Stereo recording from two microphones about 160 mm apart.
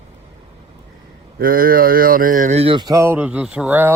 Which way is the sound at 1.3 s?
65° right (ahead or behind).